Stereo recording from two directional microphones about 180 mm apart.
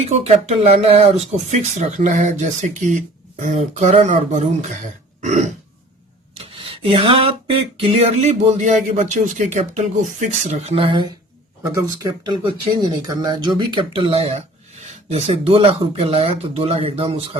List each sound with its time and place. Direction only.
0.1 s speech: 40° right (ahead or behind)
5.2 s burping: 40° right (ahead or behind)
6.3 s a sound: 30° right (ahead or behind)
9.0 s speech: 40° right (ahead or behind)